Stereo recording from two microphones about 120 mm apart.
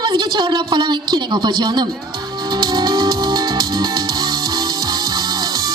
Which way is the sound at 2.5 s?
35° right (ahead or behind).